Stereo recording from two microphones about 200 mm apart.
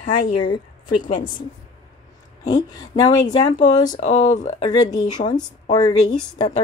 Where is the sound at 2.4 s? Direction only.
20° left (ahead or behind).